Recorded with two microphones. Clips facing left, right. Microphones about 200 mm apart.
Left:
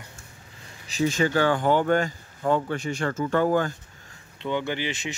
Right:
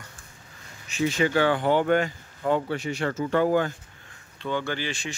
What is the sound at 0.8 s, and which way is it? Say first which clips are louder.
Speech: left 1 dB; 40° left (ahead or behind).